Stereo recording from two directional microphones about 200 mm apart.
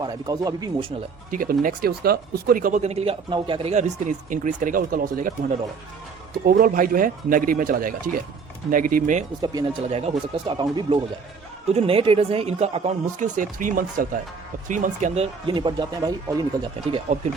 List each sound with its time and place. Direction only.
0.0 s speech: 20° right (ahead or behind)
1.3 s speech: 45° right (ahead or behind)
9.4 s speech: 20° right (ahead or behind)